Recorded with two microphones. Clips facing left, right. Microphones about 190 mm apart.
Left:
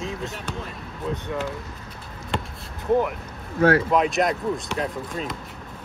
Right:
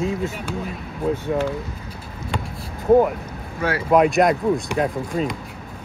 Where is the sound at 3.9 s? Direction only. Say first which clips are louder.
Right 5 dB; 50° right (ahead or behind).